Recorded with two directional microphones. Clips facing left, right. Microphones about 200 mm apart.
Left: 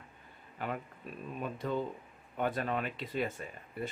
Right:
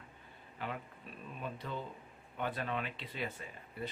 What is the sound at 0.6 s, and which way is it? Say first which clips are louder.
Speech: left 4 dB; 50° left (ahead or behind).